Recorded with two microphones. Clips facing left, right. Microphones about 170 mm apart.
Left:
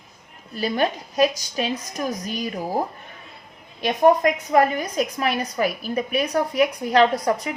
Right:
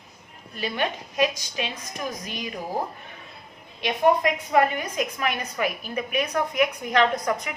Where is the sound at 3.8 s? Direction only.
40° left (ahead or behind).